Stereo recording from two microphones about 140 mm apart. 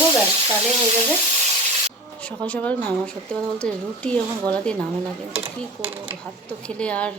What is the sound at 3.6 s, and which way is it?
Speech, 5° left (ahead or behind).